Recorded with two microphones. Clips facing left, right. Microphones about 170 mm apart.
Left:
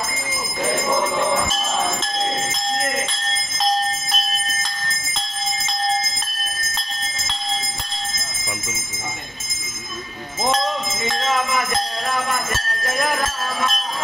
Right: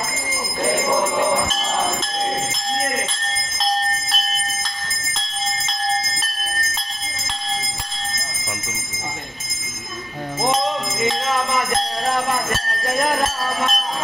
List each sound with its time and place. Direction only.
0.7 s speech: 10° right (ahead or behind)
13.0 s jingle bell: 30° right (ahead or behind)